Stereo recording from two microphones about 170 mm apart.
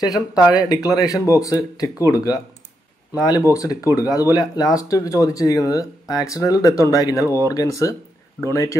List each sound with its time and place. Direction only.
0.5 s speech: 25° left (ahead or behind)